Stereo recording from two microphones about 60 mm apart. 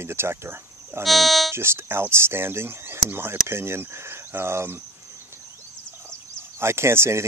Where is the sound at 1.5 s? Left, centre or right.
Right.